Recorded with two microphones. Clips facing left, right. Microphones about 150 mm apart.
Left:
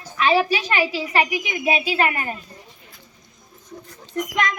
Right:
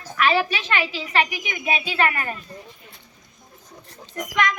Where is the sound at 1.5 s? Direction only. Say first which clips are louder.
Left 4 dB; 30° left (ahead or behind).